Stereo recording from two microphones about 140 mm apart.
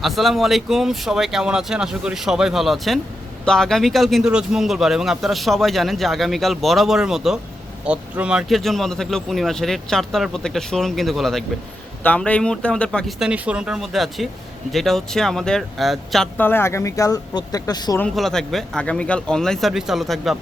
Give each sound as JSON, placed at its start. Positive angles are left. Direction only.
{"t": 0.0, "sound": "speech", "side_deg": 0}
{"t": 16.4, "sound": "speech", "side_deg": 15}
{"t": 18.1, "sound": "speech", "side_deg": 0}